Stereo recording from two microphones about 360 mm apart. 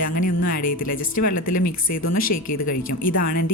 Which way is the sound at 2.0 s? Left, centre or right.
Left.